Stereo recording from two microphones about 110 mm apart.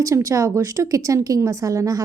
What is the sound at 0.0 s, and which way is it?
A woman's voice, 30° right (ahead or behind).